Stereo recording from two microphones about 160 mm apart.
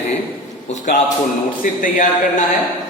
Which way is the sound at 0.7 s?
50° left (ahead or behind).